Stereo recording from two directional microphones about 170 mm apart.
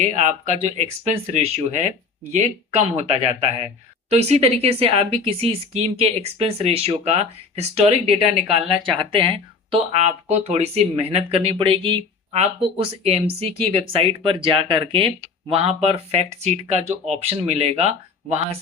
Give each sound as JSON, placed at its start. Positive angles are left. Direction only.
{"t": 0.0, "sound": "speech", "side_deg": -45}
{"t": 9.7, "sound": "speech", "side_deg": -40}